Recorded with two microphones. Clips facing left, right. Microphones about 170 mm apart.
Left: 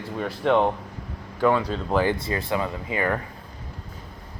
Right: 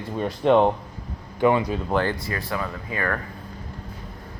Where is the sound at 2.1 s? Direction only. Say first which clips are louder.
Left 3 dB; 25° left (ahead or behind).